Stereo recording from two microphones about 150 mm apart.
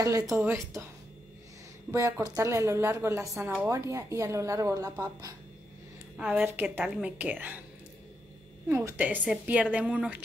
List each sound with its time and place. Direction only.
0.0 s a woman's voice: 20° right (ahead or behind)
1.9 s a woman's voice: 20° right (ahead or behind)
6.1 s a woman's voice: 10° right (ahead or behind)
8.6 s a woman's voice: 15° right (ahead or behind)